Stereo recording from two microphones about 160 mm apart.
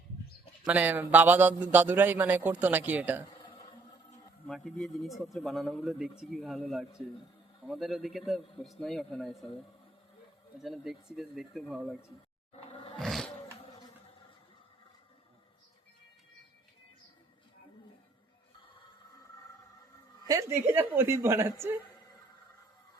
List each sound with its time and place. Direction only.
0.6 s a man's voice: 10° right (ahead or behind)
3.2 s a sound: 30° left (ahead or behind)
4.4 s speech: centre (ahead or behind)
10.6 s speech: centre (ahead or behind)
12.5 s roar: 35° left (ahead or behind)
13.0 s a sound: centre (ahead or behind)
20.2 s a woman's voice: 20° right (ahead or behind)